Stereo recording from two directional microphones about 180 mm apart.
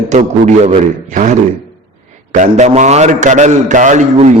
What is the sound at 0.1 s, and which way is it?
A man's voice, 40° right (ahead or behind).